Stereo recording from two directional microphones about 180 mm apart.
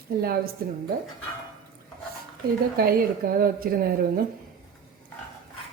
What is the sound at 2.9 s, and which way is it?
A woman's voice, 55° right (ahead or behind).